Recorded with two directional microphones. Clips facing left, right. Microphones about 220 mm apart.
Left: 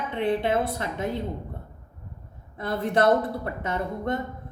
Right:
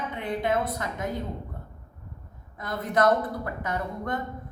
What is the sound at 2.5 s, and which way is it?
A woman's voice, 30° left (ahead or behind).